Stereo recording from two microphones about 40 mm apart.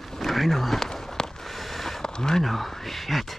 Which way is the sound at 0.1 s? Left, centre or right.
Centre.